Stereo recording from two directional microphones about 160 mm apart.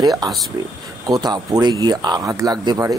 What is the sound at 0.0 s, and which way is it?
Speech, 25° right (ahead or behind).